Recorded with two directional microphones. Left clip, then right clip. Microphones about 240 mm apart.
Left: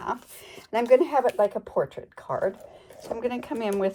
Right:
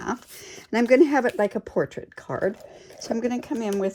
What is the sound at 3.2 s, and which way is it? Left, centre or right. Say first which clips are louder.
Speech: even; centre.